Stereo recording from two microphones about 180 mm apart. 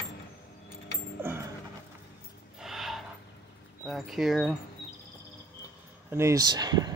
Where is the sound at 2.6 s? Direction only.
Centre (ahead or behind).